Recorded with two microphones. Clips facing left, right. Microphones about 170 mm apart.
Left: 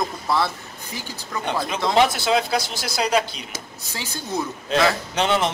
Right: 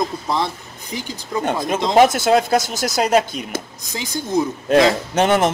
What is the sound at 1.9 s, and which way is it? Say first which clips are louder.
A man's voice: right 6 dB; 45° right (ahead or behind).